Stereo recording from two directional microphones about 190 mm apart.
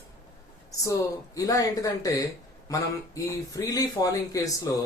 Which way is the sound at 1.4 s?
15° left (ahead or behind).